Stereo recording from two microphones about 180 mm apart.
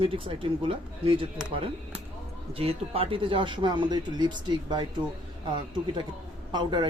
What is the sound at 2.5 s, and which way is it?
Speech, 30° right (ahead or behind).